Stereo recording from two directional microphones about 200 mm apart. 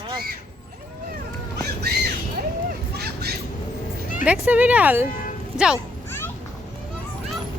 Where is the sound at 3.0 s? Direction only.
50° right (ahead or behind).